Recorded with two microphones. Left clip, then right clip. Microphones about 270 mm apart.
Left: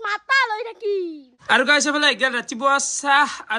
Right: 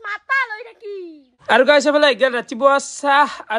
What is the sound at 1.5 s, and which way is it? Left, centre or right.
Speech, centre.